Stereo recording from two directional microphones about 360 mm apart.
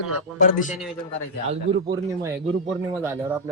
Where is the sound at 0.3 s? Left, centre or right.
Left.